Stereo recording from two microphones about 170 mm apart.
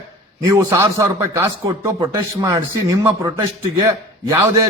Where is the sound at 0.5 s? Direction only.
15° right (ahead or behind).